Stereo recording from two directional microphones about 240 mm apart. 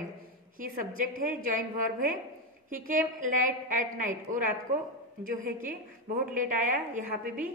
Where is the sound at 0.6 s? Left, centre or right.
Right.